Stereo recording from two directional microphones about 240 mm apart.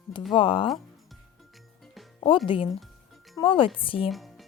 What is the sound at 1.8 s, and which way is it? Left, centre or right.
Music, centre.